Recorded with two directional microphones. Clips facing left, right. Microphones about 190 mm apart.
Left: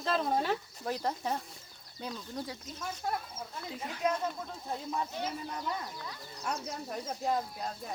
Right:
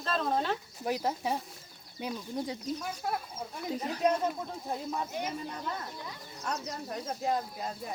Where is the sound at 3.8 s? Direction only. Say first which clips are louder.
Right 5 dB; 40° right (ahead or behind).